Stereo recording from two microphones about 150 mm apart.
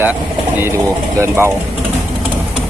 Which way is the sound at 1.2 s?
15° right (ahead or behind).